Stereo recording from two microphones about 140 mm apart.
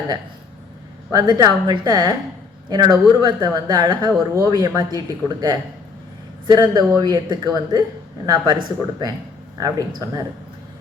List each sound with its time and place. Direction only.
1.1 s speech: 30° right (ahead or behind)